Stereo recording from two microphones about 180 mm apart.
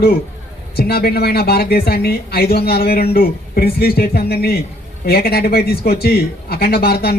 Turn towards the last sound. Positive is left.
turn(degrees=60)  # may be behind; listen again after turning